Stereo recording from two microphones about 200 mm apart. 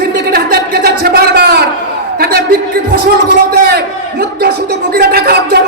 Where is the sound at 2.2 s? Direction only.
50° right (ahead or behind).